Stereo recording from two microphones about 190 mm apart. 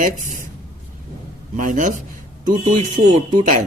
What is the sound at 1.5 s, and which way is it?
A man's voice, 45° right (ahead or behind).